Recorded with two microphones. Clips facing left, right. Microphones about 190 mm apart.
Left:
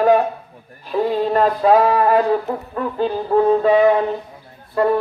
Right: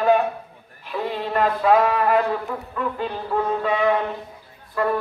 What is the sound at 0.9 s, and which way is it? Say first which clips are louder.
Speech: left 7 dB; 35° left (ahead or behind).